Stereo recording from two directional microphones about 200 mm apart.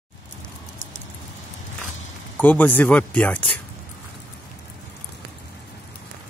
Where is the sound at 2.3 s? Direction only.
10° left (ahead or behind).